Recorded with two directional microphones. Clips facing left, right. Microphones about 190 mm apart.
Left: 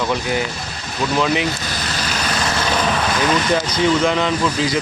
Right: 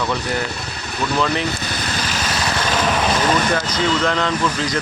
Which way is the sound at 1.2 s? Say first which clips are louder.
Left 2 dB; 15° left (ahead or behind).